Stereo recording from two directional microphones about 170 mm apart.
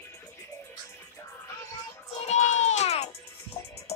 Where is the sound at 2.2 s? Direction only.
45° left (ahead or behind).